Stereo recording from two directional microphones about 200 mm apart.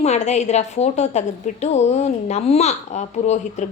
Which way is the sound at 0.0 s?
35° left (ahead or behind).